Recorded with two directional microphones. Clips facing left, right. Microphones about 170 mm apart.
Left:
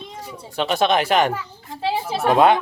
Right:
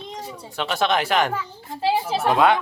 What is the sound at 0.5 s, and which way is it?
Speech, 20° left (ahead or behind).